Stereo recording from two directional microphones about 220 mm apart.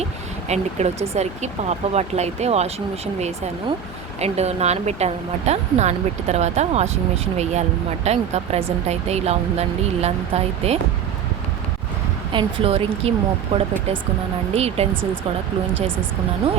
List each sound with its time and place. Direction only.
0.0 s speech: 30° right (ahead or behind)
12.3 s speech: 20° right (ahead or behind)